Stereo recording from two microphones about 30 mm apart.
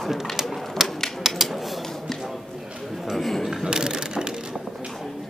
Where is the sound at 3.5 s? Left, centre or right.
Right.